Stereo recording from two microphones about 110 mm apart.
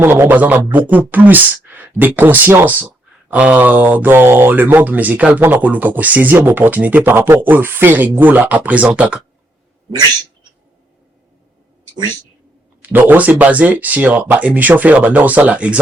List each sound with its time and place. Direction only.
0.0 s speech: 20° right (ahead or behind)
12.8 s speech: 15° right (ahead or behind)